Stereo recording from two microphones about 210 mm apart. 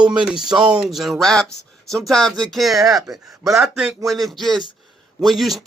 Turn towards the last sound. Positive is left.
turn(degrees=0)  # may be behind; listen again after turning